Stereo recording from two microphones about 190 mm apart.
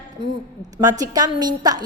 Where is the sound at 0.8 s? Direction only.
20° right (ahead or behind).